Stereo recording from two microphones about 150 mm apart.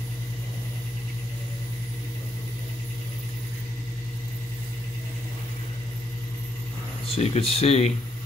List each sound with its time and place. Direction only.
7.1 s speech: 40° left (ahead or behind)